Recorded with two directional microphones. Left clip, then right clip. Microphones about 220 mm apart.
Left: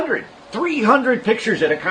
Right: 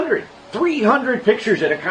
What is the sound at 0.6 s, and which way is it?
Speech, 40° left (ahead or behind).